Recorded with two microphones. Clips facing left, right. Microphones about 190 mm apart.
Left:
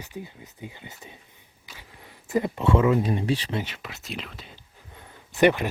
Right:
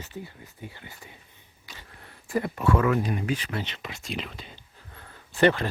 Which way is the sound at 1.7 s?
15° left (ahead or behind).